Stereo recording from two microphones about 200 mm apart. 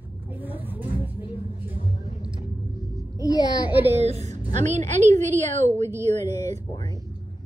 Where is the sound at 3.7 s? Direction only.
10° right (ahead or behind).